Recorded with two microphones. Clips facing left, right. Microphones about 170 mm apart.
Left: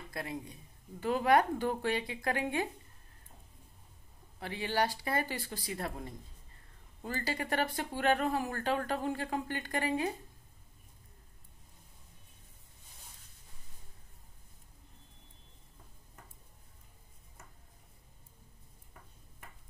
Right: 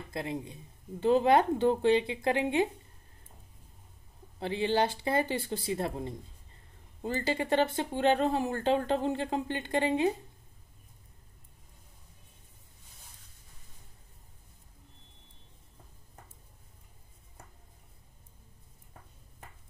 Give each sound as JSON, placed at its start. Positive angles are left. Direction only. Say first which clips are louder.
{"t": 0.1, "sound": "speech", "louder": "right 5 dB", "side_deg": -25}
{"t": 4.4, "sound": "speech", "louder": "right 5 dB", "side_deg": -25}